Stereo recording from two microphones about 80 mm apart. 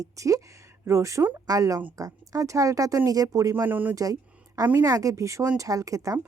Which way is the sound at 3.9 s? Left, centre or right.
Right.